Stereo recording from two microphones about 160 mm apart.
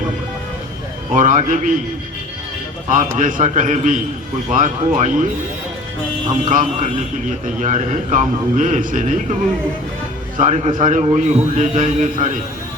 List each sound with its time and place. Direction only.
1.1 s a man's voice: 50° right (ahead or behind)
2.9 s a man's voice: 55° right (ahead or behind)
6.4 s a man's voice: 50° right (ahead or behind)
10.3 s a man's voice: 50° right (ahead or behind)